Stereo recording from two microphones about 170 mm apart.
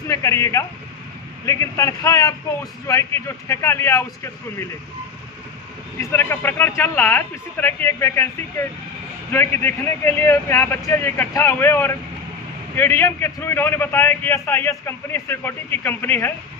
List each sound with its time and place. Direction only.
0.1 s a man's voice: 15° left (ahead or behind)
6.0 s a man's voice: 10° left (ahead or behind)